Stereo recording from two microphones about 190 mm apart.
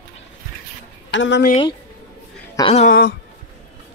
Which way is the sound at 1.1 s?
70° left (ahead or behind).